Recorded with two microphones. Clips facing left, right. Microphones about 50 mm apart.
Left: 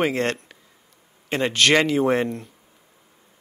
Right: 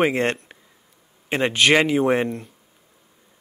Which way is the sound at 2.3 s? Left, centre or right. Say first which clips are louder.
Right 1 dB; centre.